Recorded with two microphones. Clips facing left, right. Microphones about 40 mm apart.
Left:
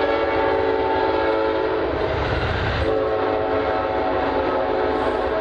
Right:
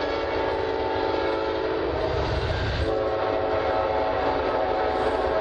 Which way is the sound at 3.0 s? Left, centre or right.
Centre.